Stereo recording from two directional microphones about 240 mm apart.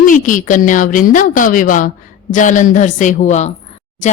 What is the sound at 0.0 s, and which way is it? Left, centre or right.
A woman's voice, left.